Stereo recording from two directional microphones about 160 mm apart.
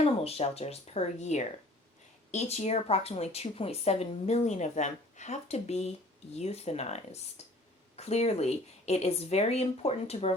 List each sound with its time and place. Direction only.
0.0 s a woman's voice: 40° left (ahead or behind)